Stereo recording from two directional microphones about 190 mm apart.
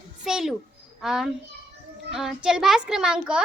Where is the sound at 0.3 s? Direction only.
5° right (ahead or behind).